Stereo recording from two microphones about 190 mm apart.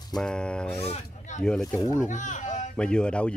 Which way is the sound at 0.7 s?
35° left (ahead or behind).